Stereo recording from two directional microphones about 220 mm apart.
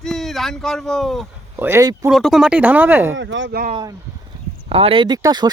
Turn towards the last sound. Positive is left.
turn(degrees=-20)  # may be behind; listen again after turning